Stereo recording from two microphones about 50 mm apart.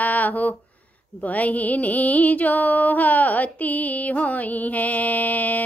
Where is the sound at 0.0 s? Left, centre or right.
Left.